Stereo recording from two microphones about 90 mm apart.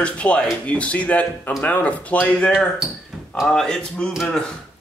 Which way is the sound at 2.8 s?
5° right (ahead or behind).